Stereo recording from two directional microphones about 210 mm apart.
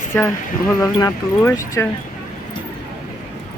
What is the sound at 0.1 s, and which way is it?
Speech, 10° left (ahead or behind).